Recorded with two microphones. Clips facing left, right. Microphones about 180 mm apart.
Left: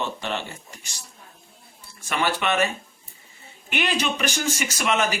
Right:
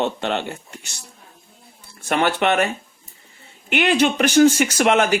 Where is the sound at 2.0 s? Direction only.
60° right (ahead or behind).